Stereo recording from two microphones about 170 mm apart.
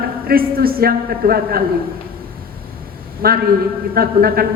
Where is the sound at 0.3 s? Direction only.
60° right (ahead or behind).